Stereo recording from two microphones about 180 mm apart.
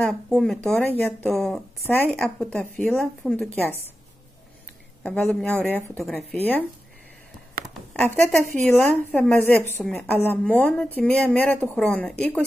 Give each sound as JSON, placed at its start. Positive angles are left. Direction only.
{"t": 0.0, "sound": "a woman's voice", "side_deg": 5}
{"t": 5.0, "sound": "a woman's voice", "side_deg": 5}
{"t": 8.1, "sound": "a woman's voice", "side_deg": 10}